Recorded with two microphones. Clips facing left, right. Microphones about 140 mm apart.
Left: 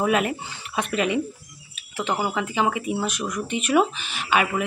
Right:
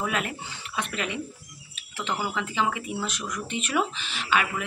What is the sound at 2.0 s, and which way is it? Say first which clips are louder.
Speech: left 4 dB; 50° left (ahead or behind).